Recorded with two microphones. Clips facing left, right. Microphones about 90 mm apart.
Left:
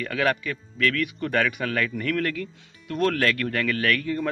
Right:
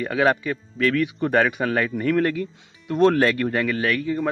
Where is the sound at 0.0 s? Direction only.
25° right (ahead or behind).